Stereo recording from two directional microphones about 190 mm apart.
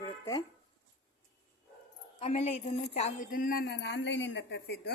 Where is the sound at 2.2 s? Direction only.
35° left (ahead or behind).